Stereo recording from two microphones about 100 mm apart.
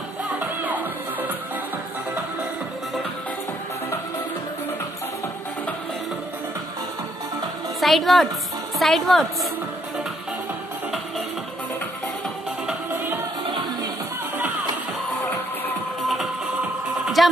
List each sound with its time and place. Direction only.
0.4 s music: 15° right (ahead or behind)
7.8 s a woman's voice: centre (ahead or behind)
17.2 s a sound: centre (ahead or behind)